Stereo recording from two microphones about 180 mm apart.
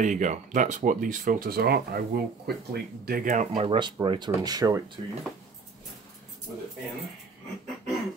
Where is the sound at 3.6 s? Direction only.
30° right (ahead or behind).